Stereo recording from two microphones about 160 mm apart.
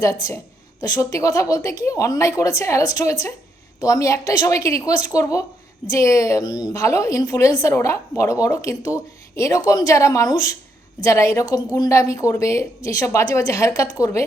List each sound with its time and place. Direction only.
0.0 s a woman's voice: 20° left (ahead or behind)